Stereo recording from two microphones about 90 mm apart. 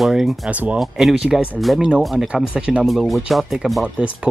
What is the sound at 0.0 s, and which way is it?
Speech, centre (ahead or behind).